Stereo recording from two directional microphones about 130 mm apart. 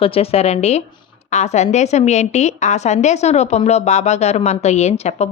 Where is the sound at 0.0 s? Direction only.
50° left (ahead or behind).